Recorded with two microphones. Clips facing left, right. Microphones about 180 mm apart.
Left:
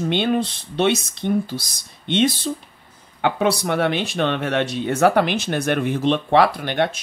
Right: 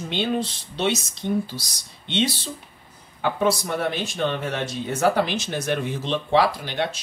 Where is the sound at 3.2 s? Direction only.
70° left (ahead or behind).